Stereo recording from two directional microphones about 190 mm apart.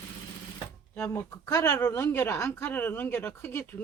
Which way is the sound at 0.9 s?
15° left (ahead or behind).